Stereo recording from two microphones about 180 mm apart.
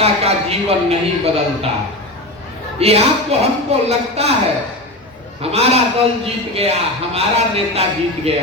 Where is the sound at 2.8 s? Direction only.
35° right (ahead or behind).